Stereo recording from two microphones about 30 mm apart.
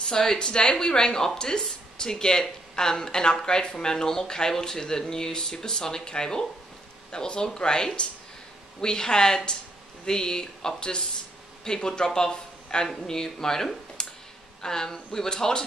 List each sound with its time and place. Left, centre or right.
0.1 s speech: left
14.0 s a sound: left
14.6 s speech: centre